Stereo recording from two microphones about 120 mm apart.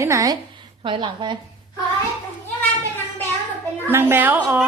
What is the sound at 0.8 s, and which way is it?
Speech, 40° right (ahead or behind).